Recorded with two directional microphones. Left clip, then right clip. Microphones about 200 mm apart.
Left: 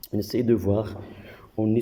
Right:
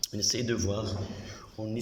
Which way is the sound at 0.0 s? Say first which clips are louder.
Left 4 dB; 25° left (ahead or behind).